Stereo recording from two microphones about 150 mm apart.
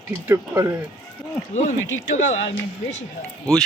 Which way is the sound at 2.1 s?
50° left (ahead or behind).